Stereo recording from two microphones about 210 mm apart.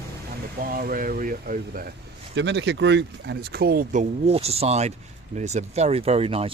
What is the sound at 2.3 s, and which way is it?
Speech, 55° right (ahead or behind).